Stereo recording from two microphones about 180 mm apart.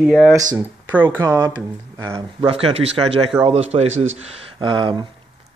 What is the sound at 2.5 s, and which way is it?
Speech, 30° right (ahead or behind).